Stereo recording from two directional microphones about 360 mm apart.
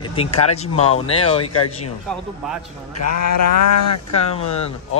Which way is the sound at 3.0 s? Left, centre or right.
Left.